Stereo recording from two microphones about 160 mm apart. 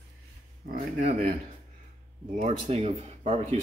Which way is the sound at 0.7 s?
50° right (ahead or behind).